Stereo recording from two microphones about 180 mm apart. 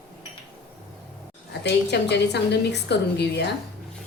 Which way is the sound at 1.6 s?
70° left (ahead or behind).